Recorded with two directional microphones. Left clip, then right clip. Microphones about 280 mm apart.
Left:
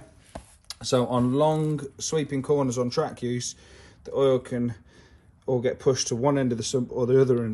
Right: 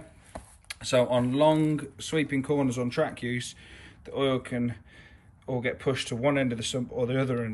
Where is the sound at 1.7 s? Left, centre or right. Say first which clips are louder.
Left 2 dB; centre.